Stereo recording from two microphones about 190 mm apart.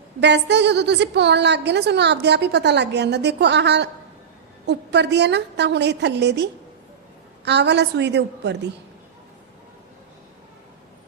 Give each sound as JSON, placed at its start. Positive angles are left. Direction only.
{"t": 0.2, "sound": "a woman's voice", "side_deg": -65}
{"t": 7.4, "sound": "a woman's voice", "side_deg": -65}